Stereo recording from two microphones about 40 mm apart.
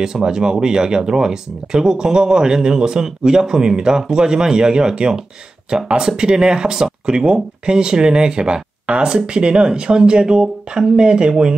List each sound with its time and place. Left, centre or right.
0.0 s speech: centre